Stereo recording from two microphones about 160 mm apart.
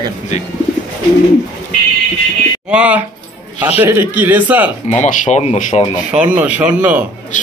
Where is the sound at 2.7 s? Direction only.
10° right (ahead or behind).